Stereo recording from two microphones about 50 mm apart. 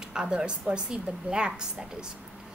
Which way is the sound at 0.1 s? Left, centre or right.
Centre.